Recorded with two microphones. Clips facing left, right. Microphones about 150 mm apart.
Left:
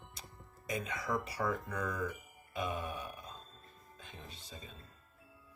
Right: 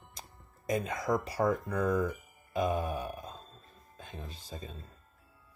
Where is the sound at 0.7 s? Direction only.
45° right (ahead or behind).